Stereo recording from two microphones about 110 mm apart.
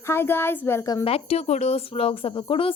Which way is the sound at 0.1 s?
20° left (ahead or behind).